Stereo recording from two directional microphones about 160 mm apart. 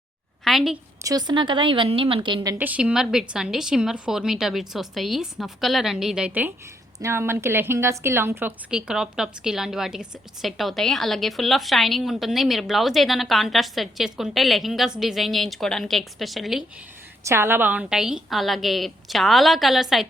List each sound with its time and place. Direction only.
0.4 s a sound: centre (ahead or behind)
1.0 s a woman's voice: 25° right (ahead or behind)
2.6 s a woman's voice: 10° right (ahead or behind)
17.2 s a woman's voice: 15° right (ahead or behind)